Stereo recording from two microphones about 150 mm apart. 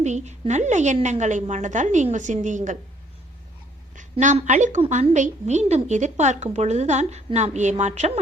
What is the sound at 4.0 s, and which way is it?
A woman's voice, 55° right (ahead or behind).